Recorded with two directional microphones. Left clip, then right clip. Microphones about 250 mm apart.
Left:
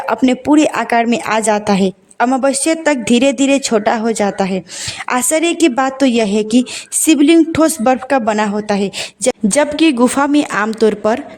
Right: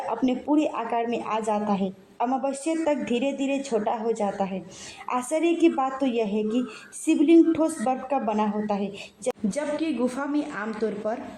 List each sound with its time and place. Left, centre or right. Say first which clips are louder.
0.1 s a woman's voice: left 13 dB; left